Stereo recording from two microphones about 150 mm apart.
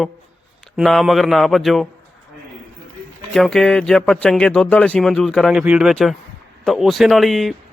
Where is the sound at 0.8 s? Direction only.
Centre (ahead or behind).